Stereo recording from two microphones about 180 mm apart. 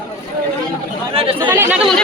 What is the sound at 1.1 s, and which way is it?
Speech, 30° right (ahead or behind).